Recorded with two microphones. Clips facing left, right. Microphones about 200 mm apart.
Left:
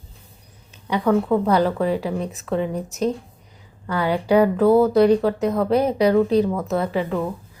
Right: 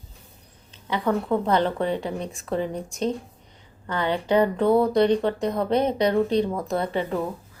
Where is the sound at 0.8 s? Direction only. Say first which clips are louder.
Left 5 dB; 15° left (ahead or behind).